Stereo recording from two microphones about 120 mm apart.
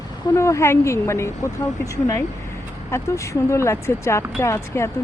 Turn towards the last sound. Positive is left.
turn(degrees=25)  # may be behind; listen again after turning